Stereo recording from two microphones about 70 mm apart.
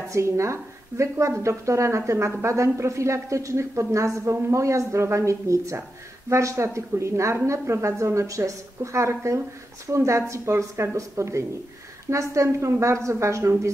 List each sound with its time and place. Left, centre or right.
0.1 s speech: right